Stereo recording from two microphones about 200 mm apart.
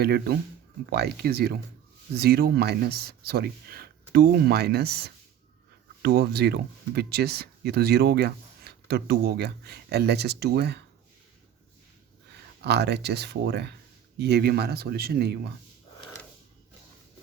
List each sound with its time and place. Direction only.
0.0 s speech: 50° right (ahead or behind)
12.6 s speech: 55° right (ahead or behind)